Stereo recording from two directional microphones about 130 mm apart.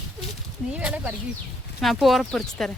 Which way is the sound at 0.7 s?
10° right (ahead or behind).